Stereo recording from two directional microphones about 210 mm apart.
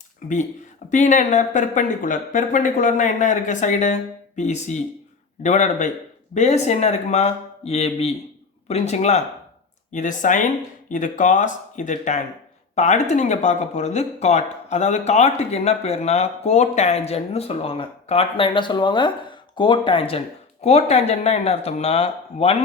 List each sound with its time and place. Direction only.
0.2 s speech: 40° left (ahead or behind)